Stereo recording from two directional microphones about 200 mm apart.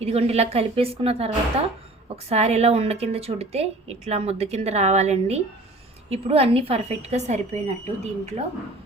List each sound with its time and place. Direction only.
0.0 s a woman's voice: 30° right (ahead or behind)